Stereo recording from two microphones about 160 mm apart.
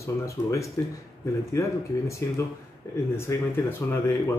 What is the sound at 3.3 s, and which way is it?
Speech, 20° left (ahead or behind).